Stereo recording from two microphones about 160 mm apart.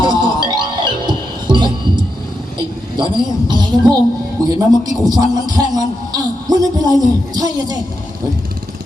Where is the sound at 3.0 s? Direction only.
25° right (ahead or behind).